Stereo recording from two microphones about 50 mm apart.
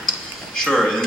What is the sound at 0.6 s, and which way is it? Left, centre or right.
Speech, centre.